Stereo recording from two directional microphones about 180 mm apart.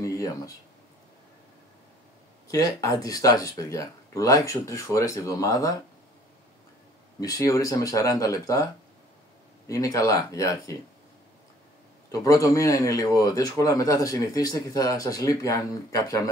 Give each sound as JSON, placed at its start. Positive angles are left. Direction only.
{"t": 2.4, "sound": "speech", "side_deg": 20}
{"t": 7.2, "sound": "speech", "side_deg": 20}
{"t": 9.7, "sound": "speech", "side_deg": 20}
{"t": 12.1, "sound": "speech", "side_deg": 15}